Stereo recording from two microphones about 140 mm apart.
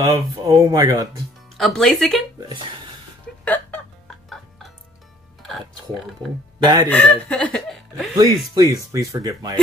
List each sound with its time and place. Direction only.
0.0 s speech: 25° right (ahead or behind)
1.6 s speech: 5° left (ahead or behind)
3.4 s music: 10° left (ahead or behind)
6.6 s speech: 30° right (ahead or behind)
6.9 s speech: 10° left (ahead or behind)
8.9 s speech: 25° right (ahead or behind)